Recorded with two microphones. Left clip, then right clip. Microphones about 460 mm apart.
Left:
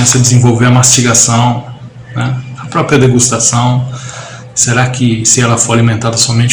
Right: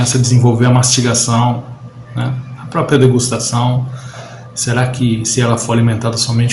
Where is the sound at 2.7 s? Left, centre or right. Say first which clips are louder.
Left 3 dB; right.